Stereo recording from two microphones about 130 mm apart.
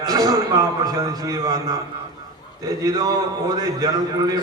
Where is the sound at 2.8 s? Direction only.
30° right (ahead or behind).